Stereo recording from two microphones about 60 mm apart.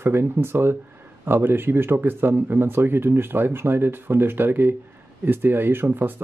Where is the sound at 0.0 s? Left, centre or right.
Right.